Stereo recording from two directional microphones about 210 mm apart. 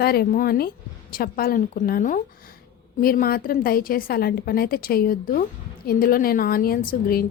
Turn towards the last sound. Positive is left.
turn(degrees=45)  # may be behind; listen again after turning